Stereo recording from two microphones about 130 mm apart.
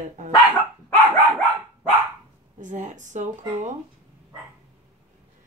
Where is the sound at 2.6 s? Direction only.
70° right (ahead or behind).